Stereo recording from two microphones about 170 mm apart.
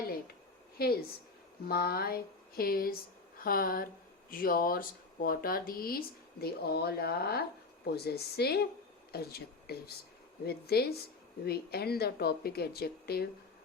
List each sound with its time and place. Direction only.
0.8 s speech: 65° left (ahead or behind)